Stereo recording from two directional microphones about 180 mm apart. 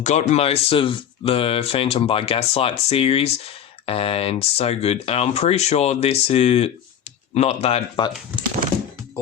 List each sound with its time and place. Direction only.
0.0 s speech: 40° left (ahead or behind)